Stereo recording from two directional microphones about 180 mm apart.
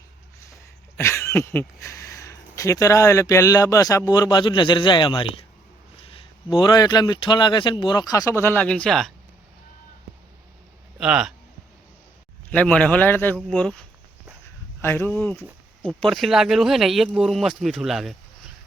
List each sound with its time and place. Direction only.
0.9 s speech: 15° left (ahead or behind); by 5.5 s 30° left (ahead or behind)
6.6 s speech: 25° left (ahead or behind); by 9.1 s 5° left (ahead or behind)
10.9 s a man's voice: 5° right (ahead or behind)
12.5 s speech: 5° left (ahead or behind)
14.8 s speech: 10° left (ahead or behind)